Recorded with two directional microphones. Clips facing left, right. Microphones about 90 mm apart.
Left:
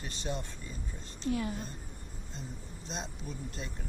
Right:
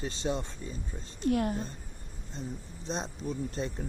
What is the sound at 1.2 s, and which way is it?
Speech, 55° right (ahead or behind).